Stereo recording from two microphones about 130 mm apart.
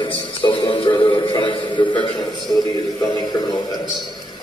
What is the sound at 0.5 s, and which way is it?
Music, 40° left (ahead or behind).